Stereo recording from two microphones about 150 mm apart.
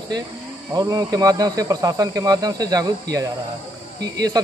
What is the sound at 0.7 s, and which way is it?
Speech, 25° right (ahead or behind).